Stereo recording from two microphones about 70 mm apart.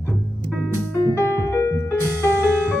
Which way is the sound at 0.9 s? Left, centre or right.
Left.